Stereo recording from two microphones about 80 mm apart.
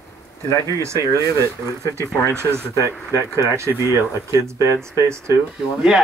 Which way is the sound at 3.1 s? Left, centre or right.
Left.